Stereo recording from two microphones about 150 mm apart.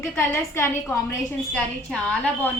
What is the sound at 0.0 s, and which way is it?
A woman's voice, 20° left (ahead or behind).